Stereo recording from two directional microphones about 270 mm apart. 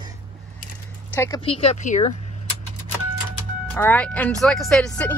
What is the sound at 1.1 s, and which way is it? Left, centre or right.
Speech, centre.